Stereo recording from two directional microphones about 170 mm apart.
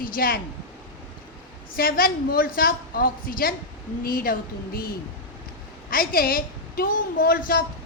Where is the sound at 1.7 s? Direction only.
60° left (ahead or behind).